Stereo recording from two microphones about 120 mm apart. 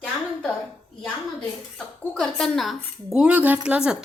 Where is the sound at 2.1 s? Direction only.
5° left (ahead or behind).